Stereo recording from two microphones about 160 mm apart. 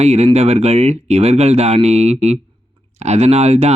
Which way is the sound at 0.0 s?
40° right (ahead or behind).